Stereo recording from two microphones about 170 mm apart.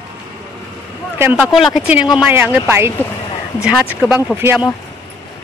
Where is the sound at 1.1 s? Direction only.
15° right (ahead or behind).